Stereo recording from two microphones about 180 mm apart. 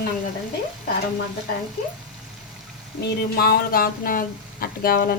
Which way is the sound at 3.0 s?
60° left (ahead or behind).